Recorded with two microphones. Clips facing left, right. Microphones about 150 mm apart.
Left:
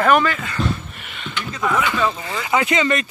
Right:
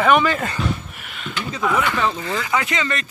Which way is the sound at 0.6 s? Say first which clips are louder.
Left 5 dB; 35° left (ahead or behind).